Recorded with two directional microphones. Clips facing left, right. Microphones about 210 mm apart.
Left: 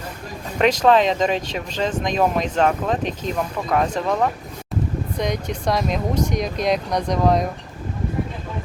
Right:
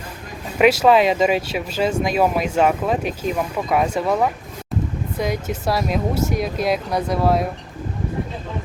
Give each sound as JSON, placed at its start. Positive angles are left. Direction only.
{"t": 0.6, "sound": "speech", "side_deg": -10}